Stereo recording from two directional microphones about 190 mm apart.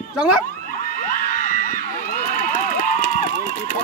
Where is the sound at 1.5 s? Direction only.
45° left (ahead or behind).